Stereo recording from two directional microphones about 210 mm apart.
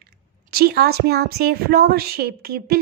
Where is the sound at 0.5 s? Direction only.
50° right (ahead or behind).